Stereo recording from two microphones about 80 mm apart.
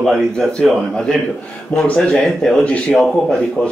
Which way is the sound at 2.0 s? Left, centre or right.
Centre.